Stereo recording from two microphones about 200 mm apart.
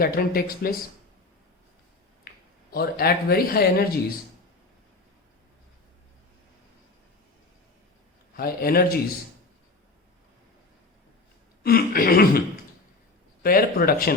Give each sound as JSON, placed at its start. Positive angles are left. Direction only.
{"t": 0.0, "sound": "speech", "side_deg": 50}
{"t": 2.3, "sound": "a sound", "side_deg": 50}
{"t": 2.7, "sound": "speech", "side_deg": 50}
{"t": 8.4, "sound": "speech", "side_deg": 50}
{"t": 11.6, "sound": "speech", "side_deg": 50}
{"t": 13.4, "sound": "speech", "side_deg": 45}